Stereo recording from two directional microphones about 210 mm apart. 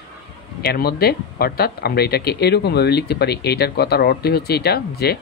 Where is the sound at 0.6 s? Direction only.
50° left (ahead or behind).